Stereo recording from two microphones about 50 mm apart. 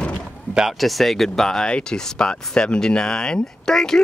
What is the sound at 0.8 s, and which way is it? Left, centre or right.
Speech, centre.